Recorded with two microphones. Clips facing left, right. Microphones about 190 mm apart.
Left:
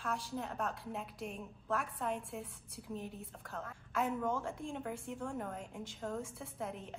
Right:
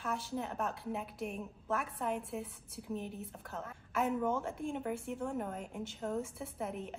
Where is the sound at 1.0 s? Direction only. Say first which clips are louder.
Right 3 dB; 60° right (ahead or behind).